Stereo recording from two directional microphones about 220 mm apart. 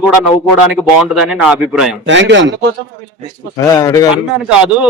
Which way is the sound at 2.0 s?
55° right (ahead or behind).